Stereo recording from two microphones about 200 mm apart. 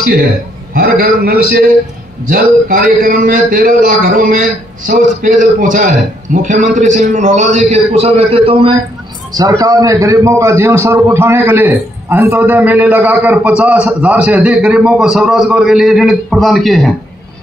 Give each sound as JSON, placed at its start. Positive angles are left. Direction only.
{"t": 0.7, "sound": "a man's voice", "side_deg": -50}
{"t": 9.3, "sound": "a man's voice", "side_deg": -20}